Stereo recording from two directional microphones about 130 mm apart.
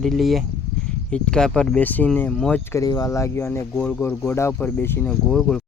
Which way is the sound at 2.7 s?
25° left (ahead or behind).